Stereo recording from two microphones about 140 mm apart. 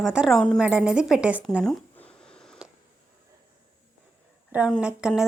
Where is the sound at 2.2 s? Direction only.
5° left (ahead or behind).